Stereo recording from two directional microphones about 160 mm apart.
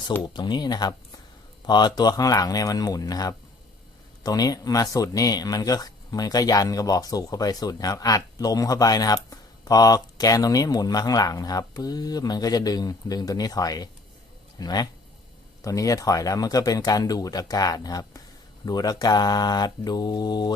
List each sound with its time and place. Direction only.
0.2 s speech: 30° left (ahead or behind)